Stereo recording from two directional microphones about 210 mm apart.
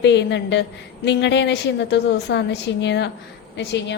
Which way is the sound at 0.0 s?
55° left (ahead or behind).